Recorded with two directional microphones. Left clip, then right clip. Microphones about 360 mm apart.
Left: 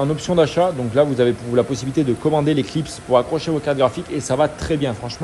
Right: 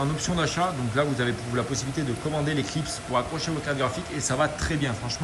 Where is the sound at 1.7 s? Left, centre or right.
Centre.